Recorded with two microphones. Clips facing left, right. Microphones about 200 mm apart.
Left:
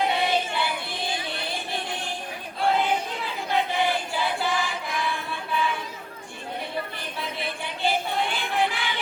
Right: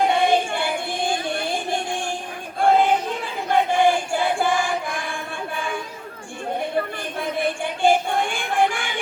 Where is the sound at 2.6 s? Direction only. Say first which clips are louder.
Right 6 dB; 50° right (ahead or behind).